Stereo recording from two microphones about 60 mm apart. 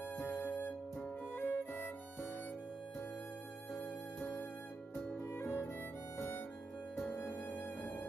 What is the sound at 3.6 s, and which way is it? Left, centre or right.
Music, left.